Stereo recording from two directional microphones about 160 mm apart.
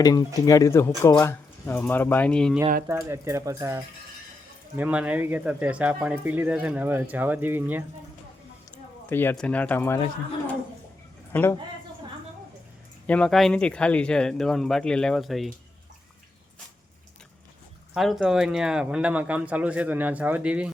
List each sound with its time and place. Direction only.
0.0 s speech: 25° left (ahead or behind); by 2.6 s 5° left (ahead or behind)
2.8 s speech: 15° right (ahead or behind)
9.0 s speech: 15° left (ahead or behind)
11.3 s speech: 15° left (ahead or behind)
13.1 s speech: 5° left (ahead or behind)
17.9 s speech: centre (ahead or behind)